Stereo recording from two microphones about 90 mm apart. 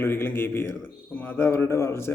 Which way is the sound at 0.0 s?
25° left (ahead or behind).